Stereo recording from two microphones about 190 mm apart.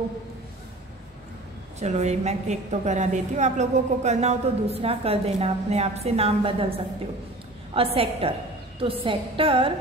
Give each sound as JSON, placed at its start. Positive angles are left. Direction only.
{"t": 1.8, "sound": "a woman's voice", "side_deg": -35}
{"t": 7.7, "sound": "a woman's voice", "side_deg": -30}
{"t": 9.0, "sound": "music", "side_deg": -30}